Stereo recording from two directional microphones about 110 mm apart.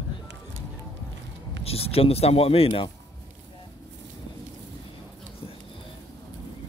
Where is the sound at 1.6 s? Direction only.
65° left (ahead or behind).